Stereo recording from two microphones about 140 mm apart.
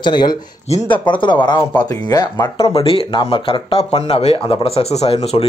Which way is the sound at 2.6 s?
40° left (ahead or behind).